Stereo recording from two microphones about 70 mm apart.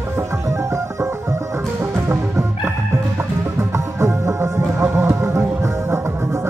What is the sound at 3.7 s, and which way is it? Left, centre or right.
Music, right.